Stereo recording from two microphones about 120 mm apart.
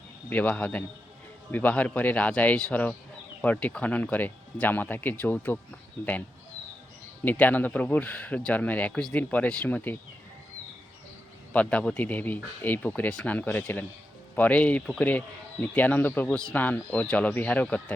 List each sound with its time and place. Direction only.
0.3 s speech: 15° left (ahead or behind)
7.3 s speech: 15° left (ahead or behind)
11.5 s speech: 10° left (ahead or behind)